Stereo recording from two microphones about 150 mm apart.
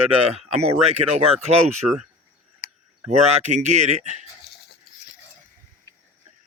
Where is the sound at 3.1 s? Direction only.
50° right (ahead or behind).